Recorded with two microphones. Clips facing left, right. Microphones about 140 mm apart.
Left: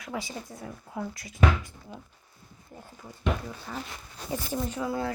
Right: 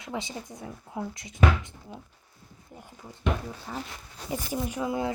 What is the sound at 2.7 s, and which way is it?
Speech, 20° left (ahead or behind).